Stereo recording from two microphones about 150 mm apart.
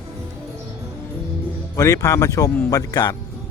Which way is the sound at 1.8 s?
20° left (ahead or behind).